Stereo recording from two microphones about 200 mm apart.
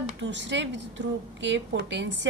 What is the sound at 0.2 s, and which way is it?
A woman's voice, 60° right (ahead or behind).